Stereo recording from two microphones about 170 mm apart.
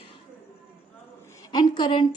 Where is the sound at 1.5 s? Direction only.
25° left (ahead or behind).